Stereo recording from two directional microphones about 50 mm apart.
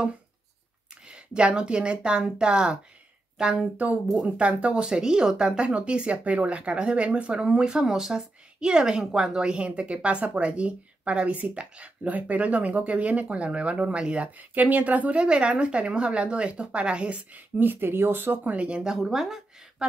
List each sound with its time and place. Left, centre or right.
1.0 s speech: centre
3.8 s speech: right
17.6 s speech: right
18.9 s speech: centre